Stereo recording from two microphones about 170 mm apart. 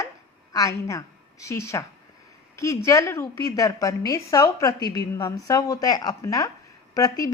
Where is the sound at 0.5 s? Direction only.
20° left (ahead or behind).